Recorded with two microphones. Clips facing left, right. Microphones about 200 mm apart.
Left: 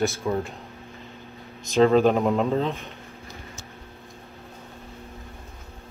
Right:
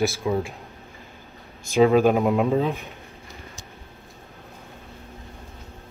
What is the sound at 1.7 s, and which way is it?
Speech, 10° right (ahead or behind).